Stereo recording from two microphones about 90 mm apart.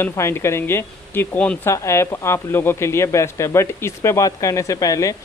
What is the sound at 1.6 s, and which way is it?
Speech, 30° left (ahead or behind).